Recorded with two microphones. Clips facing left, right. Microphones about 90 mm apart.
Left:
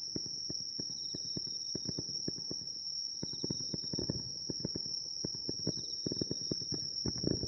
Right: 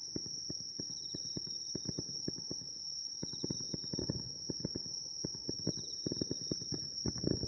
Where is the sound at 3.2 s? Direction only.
20° right (ahead or behind).